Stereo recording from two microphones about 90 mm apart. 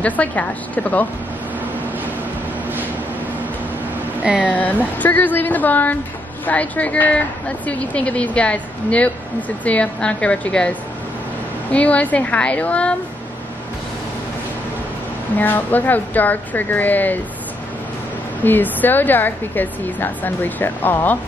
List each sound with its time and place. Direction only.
0.0 s speech: 15° left (ahead or behind)
4.4 s a woman's voice: 15° left (ahead or behind)
15.3 s a woman's voice: 20° left (ahead or behind)
18.4 s a woman's voice: 20° left (ahead or behind)